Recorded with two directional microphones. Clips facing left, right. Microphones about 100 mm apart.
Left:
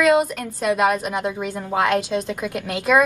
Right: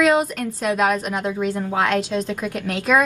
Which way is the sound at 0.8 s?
5° left (ahead or behind).